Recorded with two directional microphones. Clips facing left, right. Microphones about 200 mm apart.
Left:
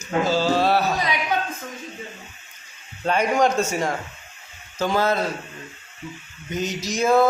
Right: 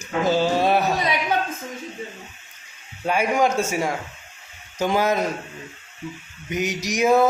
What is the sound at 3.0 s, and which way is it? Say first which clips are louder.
Speech: left 1 dB; 10° right (ahead or behind).